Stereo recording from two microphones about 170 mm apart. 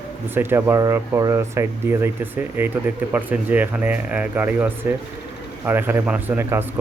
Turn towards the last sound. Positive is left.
turn(degrees=-15)  # may be behind; listen again after turning